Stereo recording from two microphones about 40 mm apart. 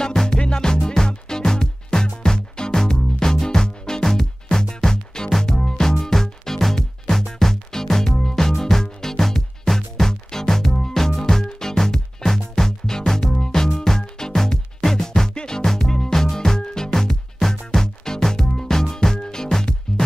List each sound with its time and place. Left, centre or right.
0.0 s music: centre